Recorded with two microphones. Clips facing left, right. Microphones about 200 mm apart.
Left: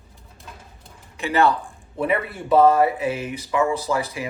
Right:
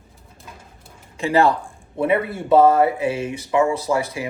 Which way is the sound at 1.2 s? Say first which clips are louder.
Right 2 dB; 30° right (ahead or behind).